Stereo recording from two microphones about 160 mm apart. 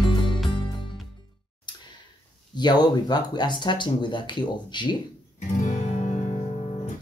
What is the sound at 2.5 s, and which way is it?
Speech, 25° left (ahead or behind).